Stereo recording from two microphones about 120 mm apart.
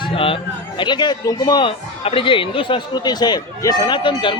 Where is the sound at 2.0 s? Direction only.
45° left (ahead or behind).